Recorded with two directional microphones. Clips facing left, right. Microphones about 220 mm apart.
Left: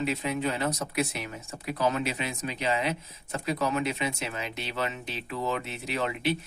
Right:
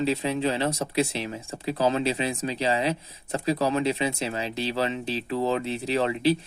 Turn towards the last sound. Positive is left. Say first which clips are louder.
# right 6 dB
turn(degrees=-30)  # may be behind; listen again after turning